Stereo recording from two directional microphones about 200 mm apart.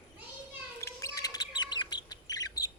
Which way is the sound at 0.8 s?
15° left (ahead or behind).